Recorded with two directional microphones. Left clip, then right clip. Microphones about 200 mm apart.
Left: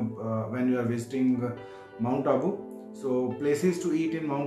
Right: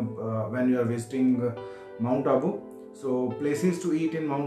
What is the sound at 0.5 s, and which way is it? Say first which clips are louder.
Music: right 3 dB; 5° left (ahead or behind).